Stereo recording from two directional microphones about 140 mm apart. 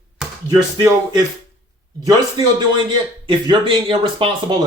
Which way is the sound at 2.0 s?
30° right (ahead or behind).